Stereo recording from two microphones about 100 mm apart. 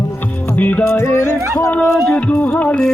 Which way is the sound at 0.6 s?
15° left (ahead or behind).